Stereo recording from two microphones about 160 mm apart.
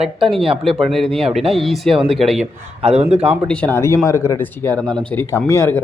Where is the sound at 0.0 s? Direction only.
Centre (ahead or behind).